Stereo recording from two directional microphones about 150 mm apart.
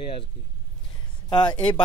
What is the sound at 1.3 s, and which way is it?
Speech, 30° left (ahead or behind).